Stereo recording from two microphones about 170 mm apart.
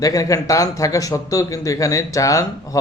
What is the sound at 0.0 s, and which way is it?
Speech, 20° left (ahead or behind).